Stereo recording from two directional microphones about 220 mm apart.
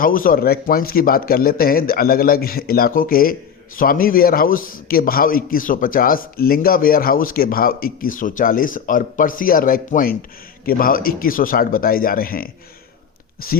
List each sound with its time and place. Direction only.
0.0 s a man's voice: 40° left (ahead or behind)